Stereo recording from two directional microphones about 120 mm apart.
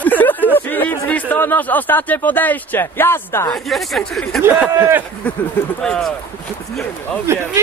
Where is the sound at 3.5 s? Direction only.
Centre (ahead or behind).